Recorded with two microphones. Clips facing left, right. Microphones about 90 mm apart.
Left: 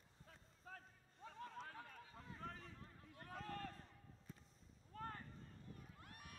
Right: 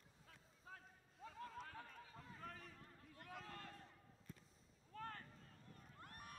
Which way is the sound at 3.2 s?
40° left (ahead or behind).